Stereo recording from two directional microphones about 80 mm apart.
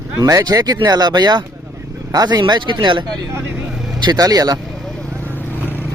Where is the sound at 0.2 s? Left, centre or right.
Right.